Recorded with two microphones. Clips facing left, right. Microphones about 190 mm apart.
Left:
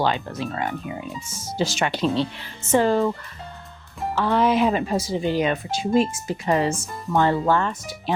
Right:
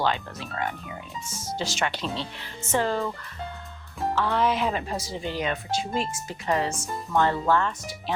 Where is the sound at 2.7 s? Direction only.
20° left (ahead or behind).